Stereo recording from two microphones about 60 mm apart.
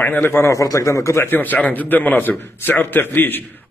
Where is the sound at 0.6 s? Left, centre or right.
Left.